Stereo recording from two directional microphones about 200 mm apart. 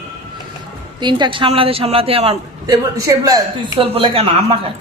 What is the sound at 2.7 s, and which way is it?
Speech, 15° right (ahead or behind).